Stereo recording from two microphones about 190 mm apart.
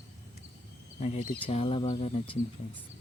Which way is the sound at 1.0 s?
35° left (ahead or behind).